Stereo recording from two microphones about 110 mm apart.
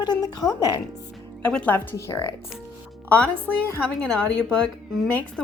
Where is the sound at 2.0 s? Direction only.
30° left (ahead or behind).